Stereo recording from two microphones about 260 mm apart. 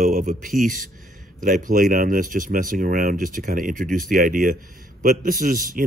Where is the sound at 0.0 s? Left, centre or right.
Right.